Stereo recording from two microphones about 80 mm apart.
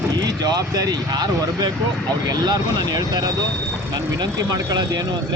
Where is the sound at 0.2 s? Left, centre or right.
Right.